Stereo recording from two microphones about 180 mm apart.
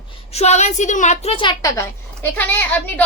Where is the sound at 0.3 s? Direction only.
40° left (ahead or behind).